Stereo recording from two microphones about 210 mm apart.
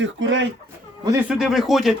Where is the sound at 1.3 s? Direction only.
Centre (ahead or behind).